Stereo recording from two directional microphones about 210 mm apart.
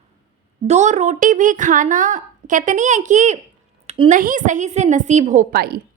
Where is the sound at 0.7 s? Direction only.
35° right (ahead or behind).